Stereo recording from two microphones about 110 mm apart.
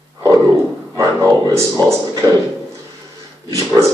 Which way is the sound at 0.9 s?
30° right (ahead or behind).